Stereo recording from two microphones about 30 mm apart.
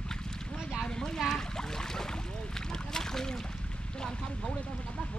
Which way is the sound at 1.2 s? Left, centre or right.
Centre.